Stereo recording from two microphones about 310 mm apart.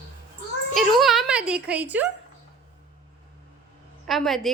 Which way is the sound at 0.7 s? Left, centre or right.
Centre.